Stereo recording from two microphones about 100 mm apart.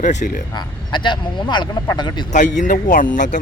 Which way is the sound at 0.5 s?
50° left (ahead or behind).